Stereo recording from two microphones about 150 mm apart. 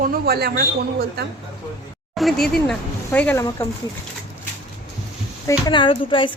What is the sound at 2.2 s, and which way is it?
Speech, centre (ahead or behind).